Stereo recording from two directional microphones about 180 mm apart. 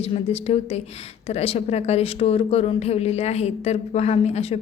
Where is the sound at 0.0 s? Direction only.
35° left (ahead or behind).